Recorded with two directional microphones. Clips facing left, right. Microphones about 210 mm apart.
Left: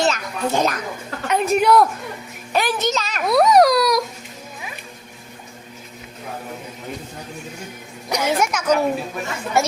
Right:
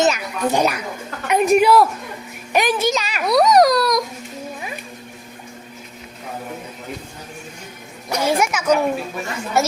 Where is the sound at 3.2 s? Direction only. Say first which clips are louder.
Even; 5° left (ahead or behind).